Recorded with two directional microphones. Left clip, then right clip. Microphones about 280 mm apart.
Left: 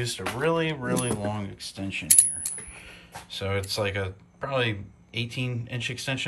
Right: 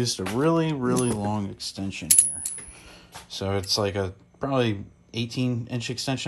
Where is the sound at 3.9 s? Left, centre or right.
Centre.